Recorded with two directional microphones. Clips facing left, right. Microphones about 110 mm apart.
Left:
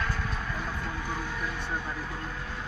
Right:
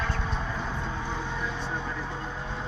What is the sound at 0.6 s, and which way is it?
Vehicle, 20° right (ahead or behind).